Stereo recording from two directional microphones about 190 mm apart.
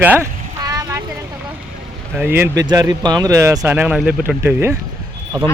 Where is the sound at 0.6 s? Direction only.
20° right (ahead or behind).